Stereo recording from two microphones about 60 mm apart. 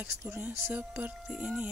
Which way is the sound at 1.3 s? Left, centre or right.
Centre.